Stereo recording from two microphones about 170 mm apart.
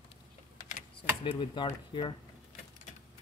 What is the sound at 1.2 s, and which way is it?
Speech, 30° left (ahead or behind).